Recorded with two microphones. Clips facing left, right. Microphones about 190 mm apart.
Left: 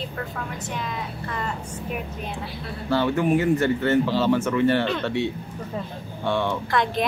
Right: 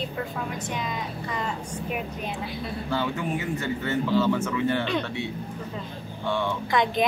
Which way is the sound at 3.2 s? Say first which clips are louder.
Left 9 dB; 45° left (ahead or behind).